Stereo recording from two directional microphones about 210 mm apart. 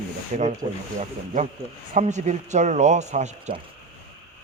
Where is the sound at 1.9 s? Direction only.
35° right (ahead or behind).